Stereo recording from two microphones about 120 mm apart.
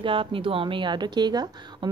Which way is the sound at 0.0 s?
45° right (ahead or behind).